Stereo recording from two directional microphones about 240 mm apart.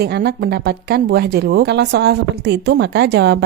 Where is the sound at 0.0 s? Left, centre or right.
Right.